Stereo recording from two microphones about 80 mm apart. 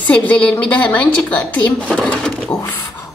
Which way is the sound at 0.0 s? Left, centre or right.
Centre.